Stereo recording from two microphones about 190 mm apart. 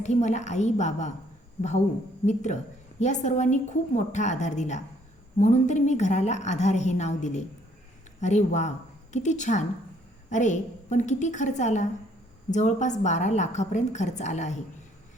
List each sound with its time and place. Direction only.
0.0 s a woman's voice: 40° left (ahead or behind)
2.2 s a woman's voice: 40° left (ahead or behind)